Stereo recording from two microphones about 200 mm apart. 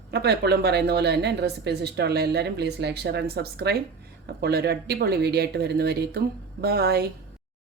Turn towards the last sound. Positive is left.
turn(degrees=-50)  # may be behind; listen again after turning